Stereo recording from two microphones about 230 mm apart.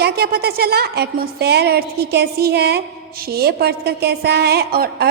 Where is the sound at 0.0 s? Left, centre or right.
Right.